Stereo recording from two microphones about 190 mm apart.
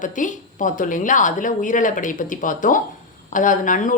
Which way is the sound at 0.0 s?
40° left (ahead or behind).